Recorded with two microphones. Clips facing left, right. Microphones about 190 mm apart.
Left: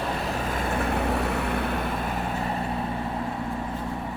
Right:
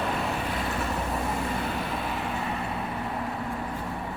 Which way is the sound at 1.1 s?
70° left (ahead or behind).